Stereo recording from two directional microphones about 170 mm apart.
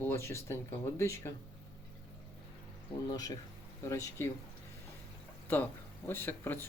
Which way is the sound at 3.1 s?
20° left (ahead or behind).